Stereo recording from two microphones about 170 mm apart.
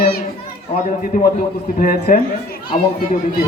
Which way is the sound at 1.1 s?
60° left (ahead or behind).